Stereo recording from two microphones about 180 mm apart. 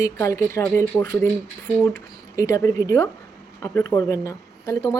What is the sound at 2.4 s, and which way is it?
A woman's voice, 20° left (ahead or behind).